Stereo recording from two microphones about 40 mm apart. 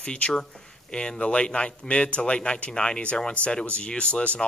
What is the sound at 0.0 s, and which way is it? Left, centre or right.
Speech, left.